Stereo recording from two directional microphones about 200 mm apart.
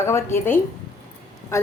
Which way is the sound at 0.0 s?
15° left (ahead or behind).